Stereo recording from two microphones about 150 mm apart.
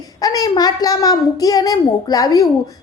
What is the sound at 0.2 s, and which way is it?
A woman's voice, 25° left (ahead or behind).